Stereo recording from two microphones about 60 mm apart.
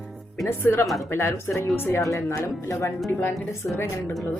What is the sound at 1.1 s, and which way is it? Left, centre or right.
Speech, left.